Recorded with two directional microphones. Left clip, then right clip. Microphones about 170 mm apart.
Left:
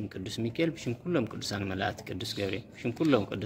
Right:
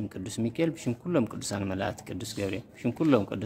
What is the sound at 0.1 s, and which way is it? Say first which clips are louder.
Speech: right 2 dB; 35° right (ahead or behind).